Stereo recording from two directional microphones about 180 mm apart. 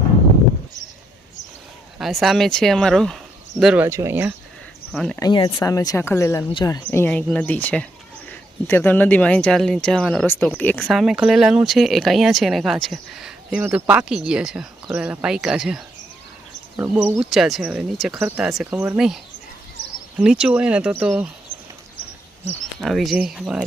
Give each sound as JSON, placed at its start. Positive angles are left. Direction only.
{"t": 2.0, "sound": "speech", "side_deg": 0}
{"t": 3.8, "sound": "speech", "side_deg": -15}
{"t": 4.9, "sound": "speech", "side_deg": 0}
{"t": 5.3, "sound": "speech", "side_deg": 30}
{"t": 5.5, "sound": "speech", "side_deg": 20}
{"t": 6.8, "sound": "speech", "side_deg": 10}
{"t": 22.8, "sound": "speech", "side_deg": 0}